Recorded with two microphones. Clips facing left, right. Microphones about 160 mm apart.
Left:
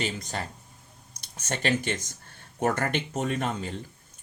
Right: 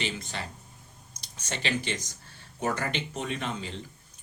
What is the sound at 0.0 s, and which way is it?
Speech, 45° left (ahead or behind).